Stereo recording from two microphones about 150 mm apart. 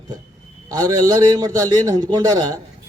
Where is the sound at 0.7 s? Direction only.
25° right (ahead or behind).